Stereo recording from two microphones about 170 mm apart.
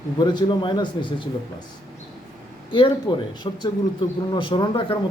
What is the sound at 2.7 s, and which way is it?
A man's voice, 30° left (ahead or behind).